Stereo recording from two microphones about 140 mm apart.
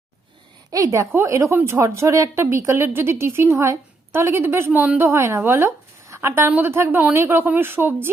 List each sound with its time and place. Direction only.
0.7 s a woman's voice: 25° right (ahead or behind)